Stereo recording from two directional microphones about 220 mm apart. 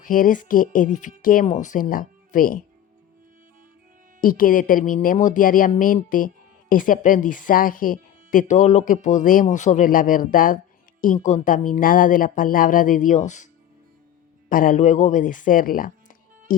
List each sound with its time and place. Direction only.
0.0 s speech: 40° left (ahead or behind)
4.2 s speech: 40° left (ahead or behind)
14.5 s speech: 40° left (ahead or behind)